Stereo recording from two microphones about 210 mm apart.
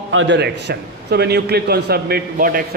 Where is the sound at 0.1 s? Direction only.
65° right (ahead or behind).